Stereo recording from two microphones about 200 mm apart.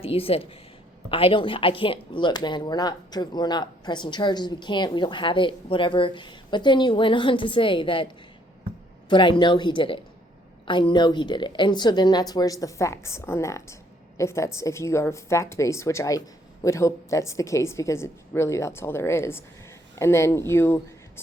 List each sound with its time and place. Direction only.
0.0 s speech: 30° left (ahead or behind)
9.0 s a woman's voice: 25° left (ahead or behind)